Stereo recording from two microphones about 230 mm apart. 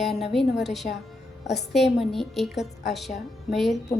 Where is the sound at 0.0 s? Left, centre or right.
Centre.